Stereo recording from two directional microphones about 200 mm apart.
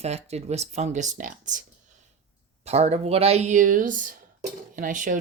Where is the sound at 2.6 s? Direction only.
30° right (ahead or behind).